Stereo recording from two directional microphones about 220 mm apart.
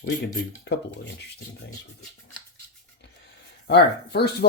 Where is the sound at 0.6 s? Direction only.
50° left (ahead or behind).